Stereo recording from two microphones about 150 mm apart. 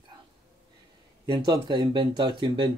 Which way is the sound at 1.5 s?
30° right (ahead or behind).